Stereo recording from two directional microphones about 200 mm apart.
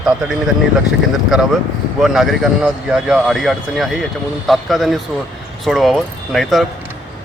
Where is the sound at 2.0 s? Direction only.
Centre (ahead or behind).